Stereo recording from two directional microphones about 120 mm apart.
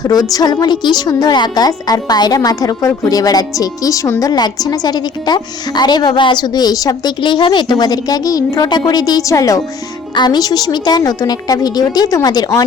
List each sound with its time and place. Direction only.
0.0 s a woman's voice: 30° left (ahead or behind)